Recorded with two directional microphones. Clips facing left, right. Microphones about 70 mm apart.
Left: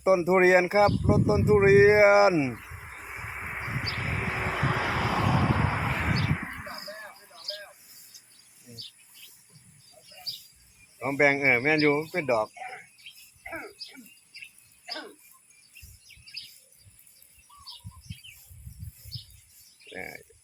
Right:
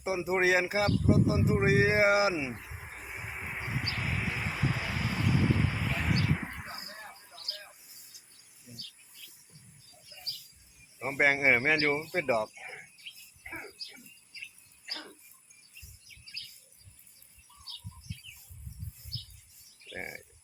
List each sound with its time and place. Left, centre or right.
0.0 s speech: left
3.8 s vehicle: left
11.0 s speech: centre
19.9 s speech: centre